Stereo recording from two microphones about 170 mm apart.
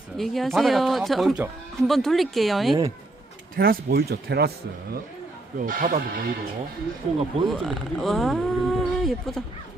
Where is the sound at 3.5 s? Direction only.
60° right (ahead or behind).